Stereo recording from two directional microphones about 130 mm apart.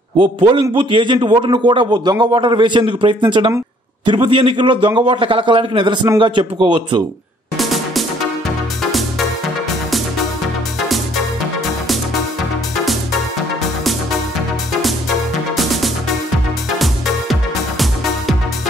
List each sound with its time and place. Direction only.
0.2 s a man's voice: 40° right (ahead or behind)
7.5 s music: centre (ahead or behind)
14.7 s music: centre (ahead or behind)